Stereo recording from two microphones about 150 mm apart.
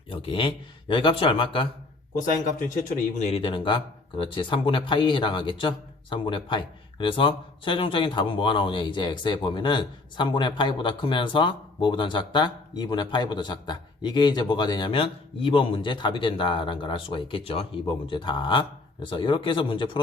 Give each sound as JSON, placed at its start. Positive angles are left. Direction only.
{"t": 0.1, "sound": "a man's voice", "side_deg": 35}
{"t": 3.2, "sound": "a man's voice", "side_deg": 45}